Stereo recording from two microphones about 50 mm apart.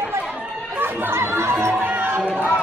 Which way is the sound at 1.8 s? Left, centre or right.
Right.